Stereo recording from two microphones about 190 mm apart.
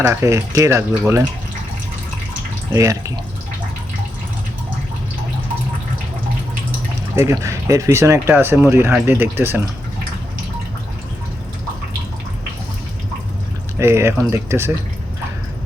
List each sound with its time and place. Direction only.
0.0 s speech: 15° right (ahead or behind)
2.7 s speech: 15° right (ahead or behind)
7.2 s speech: 15° right (ahead or behind)
13.7 s speech: 15° right (ahead or behind)